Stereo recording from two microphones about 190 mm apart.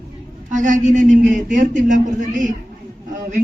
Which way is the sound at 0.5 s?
40° right (ahead or behind).